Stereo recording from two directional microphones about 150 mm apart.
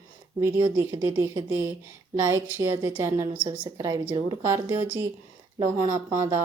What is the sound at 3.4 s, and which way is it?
Speech, 35° right (ahead or behind).